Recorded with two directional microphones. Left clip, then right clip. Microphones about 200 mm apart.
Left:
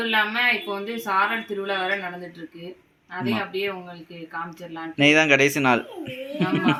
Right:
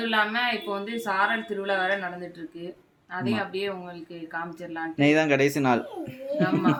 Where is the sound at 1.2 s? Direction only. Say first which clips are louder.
Left 3 dB; 30° right (ahead or behind).